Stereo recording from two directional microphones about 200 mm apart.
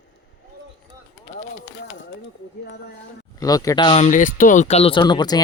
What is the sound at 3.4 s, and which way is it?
Speech, 20° left (ahead or behind).